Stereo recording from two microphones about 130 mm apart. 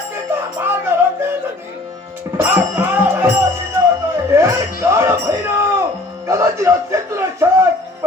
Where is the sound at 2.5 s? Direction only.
15° right (ahead or behind).